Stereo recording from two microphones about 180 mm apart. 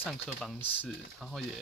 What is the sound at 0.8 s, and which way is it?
Speech, centre (ahead or behind).